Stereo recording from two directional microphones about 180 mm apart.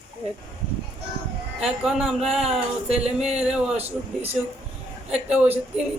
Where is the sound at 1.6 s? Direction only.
5° right (ahead or behind).